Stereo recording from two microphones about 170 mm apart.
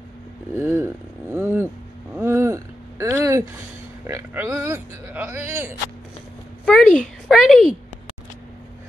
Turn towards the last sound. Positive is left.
turn(degrees=0)  # may be behind; listen again after turning